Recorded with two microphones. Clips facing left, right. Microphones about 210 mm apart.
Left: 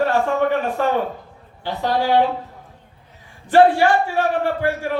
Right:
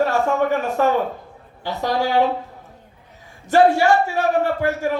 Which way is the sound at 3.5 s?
45° right (ahead or behind).